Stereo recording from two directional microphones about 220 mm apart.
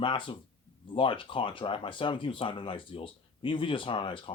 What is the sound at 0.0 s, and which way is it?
A man's voice, 20° left (ahead or behind).